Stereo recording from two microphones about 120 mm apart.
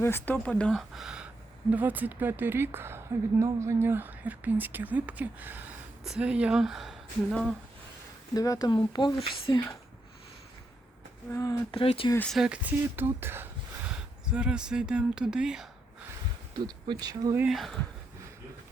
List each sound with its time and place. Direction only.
0.0 s speech: 15° left (ahead or behind); by 7.4 s centre (ahead or behind)
8.3 s speech: 30° left (ahead or behind)
11.3 s speech: 25° left (ahead or behind)
11.7 s speech: 50° left (ahead or behind)
12.3 s speech: 5° right (ahead or behind)
13.8 s speech: 5° right (ahead or behind)
16.6 s speech: 35° right (ahead or behind)
17.5 s speech: centre (ahead or behind)